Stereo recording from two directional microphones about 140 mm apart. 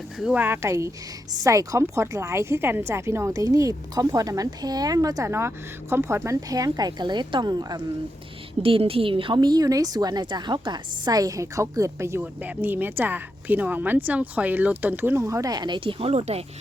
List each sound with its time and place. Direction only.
0.2 s a woman's voice: 10° right (ahead or behind); by 7.8 s 30° right (ahead or behind)
8.6 s a woman's voice: 40° right (ahead or behind)